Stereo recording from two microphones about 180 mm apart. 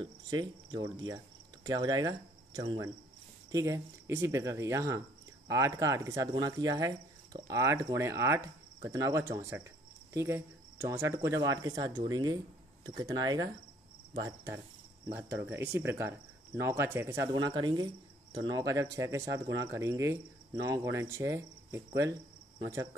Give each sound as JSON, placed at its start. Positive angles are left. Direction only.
{"t": 0.0, "sound": "speech", "side_deg": -25}
{"t": 15.0, "sound": "speech", "side_deg": -10}